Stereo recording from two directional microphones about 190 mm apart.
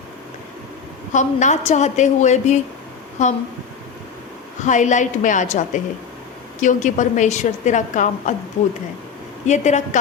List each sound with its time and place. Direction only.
1.1 s a woman's voice: 40° left (ahead or behind)
4.6 s a woman's voice: 40° left (ahead or behind)
9.5 s a woman's voice: 40° left (ahead or behind)